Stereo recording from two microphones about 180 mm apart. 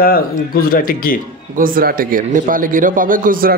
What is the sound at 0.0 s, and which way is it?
Speech, 55° left (ahead or behind).